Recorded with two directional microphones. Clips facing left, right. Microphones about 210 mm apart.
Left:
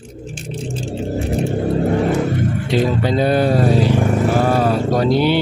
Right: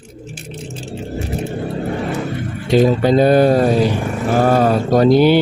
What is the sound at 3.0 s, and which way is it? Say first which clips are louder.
Speech: right 5 dB; 45° right (ahead or behind).